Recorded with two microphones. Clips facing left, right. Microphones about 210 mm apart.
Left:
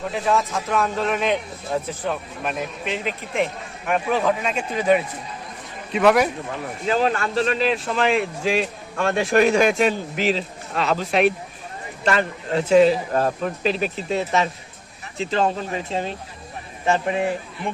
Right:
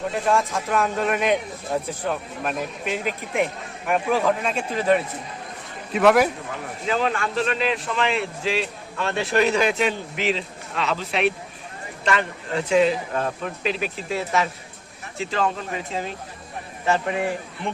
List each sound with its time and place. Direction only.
0.1 s a man's voice: centre (ahead or behind)
6.8 s a man's voice: 35° left (ahead or behind)
16.8 s speech: 20° left (ahead or behind)